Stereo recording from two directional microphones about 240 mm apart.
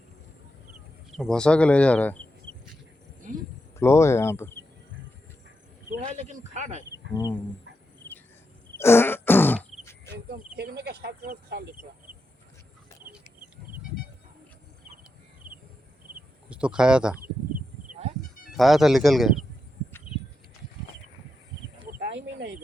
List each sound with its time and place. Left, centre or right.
1.1 s speech: centre
3.2 s a sound: right
3.8 s speech: centre
5.9 s speech: right
7.1 s speech: centre
8.8 s throat clearing: centre
10.1 s speech: right
15.4 s a sound: right
16.5 s speech: centre
18.5 s speech: centre
21.8 s a sound: right